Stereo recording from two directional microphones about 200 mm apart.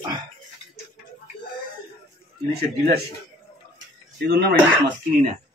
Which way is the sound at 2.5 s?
50° right (ahead or behind).